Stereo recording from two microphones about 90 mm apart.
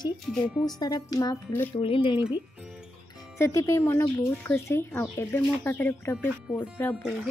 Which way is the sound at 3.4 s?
35° left (ahead or behind).